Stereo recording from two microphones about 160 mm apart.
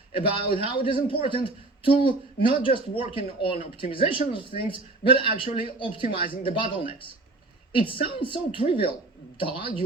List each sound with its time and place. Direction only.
0.2 s a woman's voice: 35° left (ahead or behind)